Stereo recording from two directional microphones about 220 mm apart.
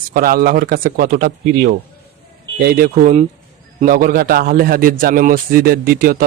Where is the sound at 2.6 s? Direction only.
40° right (ahead or behind).